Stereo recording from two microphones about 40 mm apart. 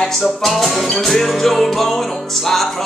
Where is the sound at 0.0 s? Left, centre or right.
Centre.